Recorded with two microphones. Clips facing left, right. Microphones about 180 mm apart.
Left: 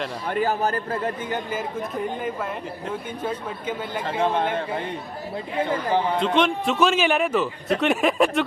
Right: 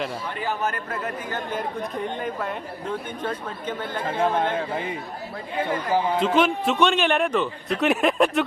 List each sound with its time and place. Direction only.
0.3 s speech: 45° left (ahead or behind)
1.5 s a man's voice: 5° left (ahead or behind)
5.9 s a man's voice: 5° right (ahead or behind)